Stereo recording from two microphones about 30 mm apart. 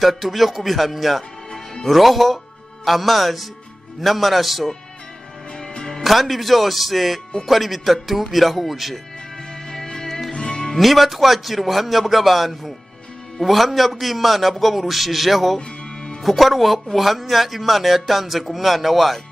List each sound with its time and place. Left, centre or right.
0.0 s speech: centre
6.0 s speech: centre
9.7 s music: centre
10.3 s music: left
10.8 s speech: centre